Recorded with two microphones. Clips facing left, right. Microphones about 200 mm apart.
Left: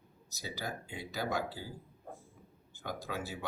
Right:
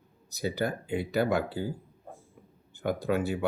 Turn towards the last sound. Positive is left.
turn(degrees=-60)  # may be behind; listen again after turning